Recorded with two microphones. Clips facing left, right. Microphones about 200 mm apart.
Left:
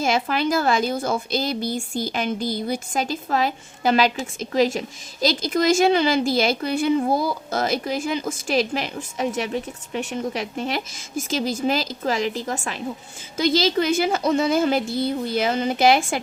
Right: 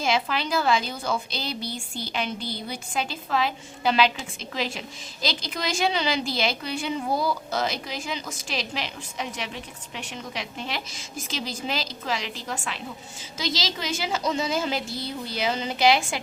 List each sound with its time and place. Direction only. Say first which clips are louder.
0.0 s a woman's voice: left 4 dB; 50° left (ahead or behind)